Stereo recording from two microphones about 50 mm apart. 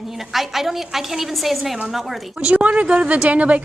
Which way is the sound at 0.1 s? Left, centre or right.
Centre.